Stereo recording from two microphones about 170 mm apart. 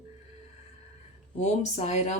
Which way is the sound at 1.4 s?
40° left (ahead or behind).